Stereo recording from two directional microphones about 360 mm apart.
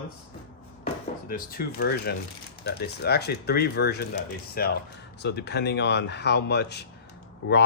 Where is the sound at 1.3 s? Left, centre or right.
Left.